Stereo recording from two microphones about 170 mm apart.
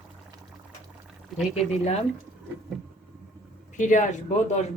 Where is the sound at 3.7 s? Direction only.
45° left (ahead or behind).